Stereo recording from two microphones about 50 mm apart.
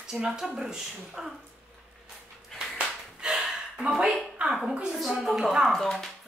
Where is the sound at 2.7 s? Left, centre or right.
Centre.